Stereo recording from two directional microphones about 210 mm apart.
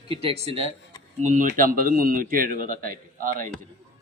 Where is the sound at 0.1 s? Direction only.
25° right (ahead or behind).